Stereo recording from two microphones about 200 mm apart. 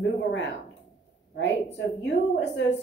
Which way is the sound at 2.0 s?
60° left (ahead or behind).